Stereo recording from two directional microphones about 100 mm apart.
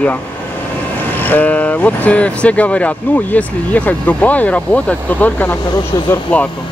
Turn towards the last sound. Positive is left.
turn(degrees=15)  # may be behind; listen again after turning